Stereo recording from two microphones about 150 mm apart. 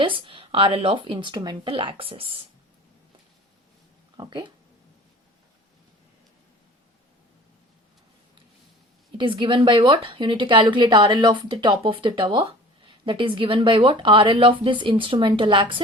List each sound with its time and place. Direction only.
0.0 s speech: 35° right (ahead or behind)
4.2 s speech: 30° right (ahead or behind)
9.1 s speech: 35° right (ahead or behind)